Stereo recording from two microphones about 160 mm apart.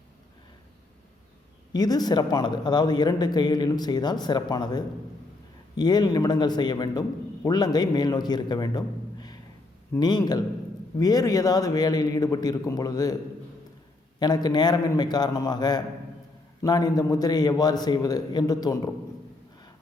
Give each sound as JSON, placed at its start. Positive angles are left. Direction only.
{"t": 1.7, "sound": "a man's voice", "side_deg": 25}
{"t": 14.2, "sound": "speech", "side_deg": 25}